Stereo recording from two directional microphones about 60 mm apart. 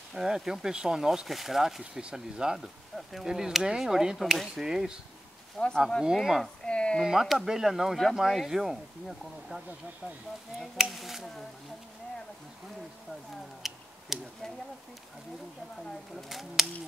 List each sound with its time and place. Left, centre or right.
0.1 s speech: centre
5.6 s speech: centre
6.1 s speech: centre
6.6 s speech: centre
7.1 s speech: centre
10.8 s speech: centre
13.6 s a sound: centre
16.2 s speech: centre